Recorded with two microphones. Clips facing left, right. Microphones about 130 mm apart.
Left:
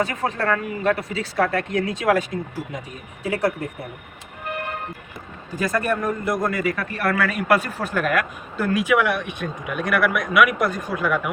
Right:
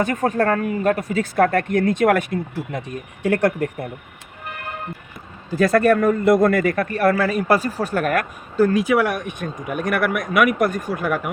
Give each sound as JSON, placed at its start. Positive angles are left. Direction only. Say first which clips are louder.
{"t": 0.0, "sound": "a man's voice", "louder": "right 4 dB", "side_deg": -45}
{"t": 5.7, "sound": "a man's voice", "louder": "right 7 dB", "side_deg": -65}